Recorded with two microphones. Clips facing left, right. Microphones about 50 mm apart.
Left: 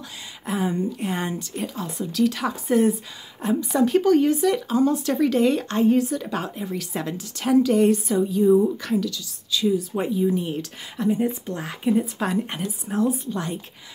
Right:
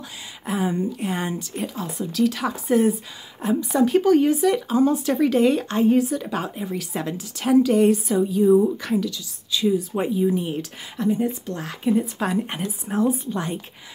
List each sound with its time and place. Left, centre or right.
0.5 s speech: centre
11.1 s speech: centre
12.4 s speech: right